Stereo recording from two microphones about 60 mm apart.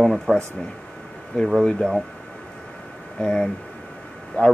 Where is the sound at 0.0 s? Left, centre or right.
Centre.